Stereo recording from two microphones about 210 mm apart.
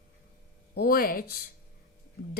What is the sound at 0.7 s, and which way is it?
Speech, 50° left (ahead or behind).